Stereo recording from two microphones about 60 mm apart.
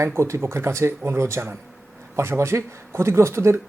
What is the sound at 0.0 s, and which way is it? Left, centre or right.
A man's voice, right.